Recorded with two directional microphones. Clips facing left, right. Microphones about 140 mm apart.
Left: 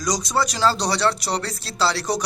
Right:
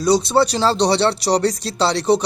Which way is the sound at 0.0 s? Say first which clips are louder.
Right 8 dB; 30° right (ahead or behind).